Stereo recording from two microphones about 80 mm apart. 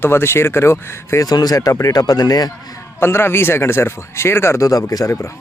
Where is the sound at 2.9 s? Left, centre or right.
Left.